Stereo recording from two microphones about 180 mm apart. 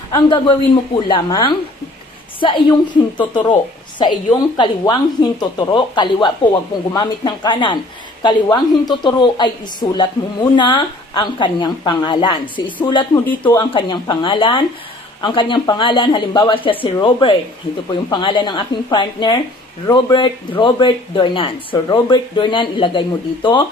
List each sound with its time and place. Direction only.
0.3 s speech: 25° left (ahead or behind)
13.2 s speech: 10° left (ahead or behind)
13.6 s speech: 25° left (ahead or behind)